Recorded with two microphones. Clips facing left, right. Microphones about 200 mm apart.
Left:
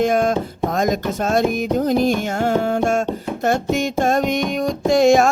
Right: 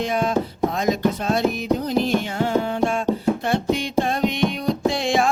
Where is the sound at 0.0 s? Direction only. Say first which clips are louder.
Left 4 dB; 45° left (ahead or behind).